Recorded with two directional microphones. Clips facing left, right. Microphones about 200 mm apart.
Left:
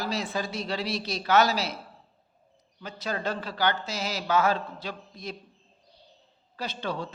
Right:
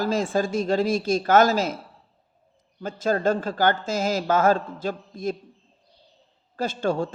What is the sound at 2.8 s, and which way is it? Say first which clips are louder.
A woman's voice: right 9 dB; 45° right (ahead or behind).